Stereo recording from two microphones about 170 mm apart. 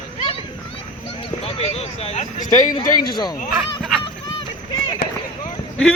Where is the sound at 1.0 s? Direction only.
30° left (ahead or behind).